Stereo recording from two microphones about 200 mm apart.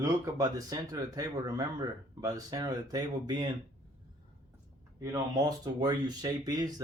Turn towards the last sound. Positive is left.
turn(degrees=-20)  # may be behind; listen again after turning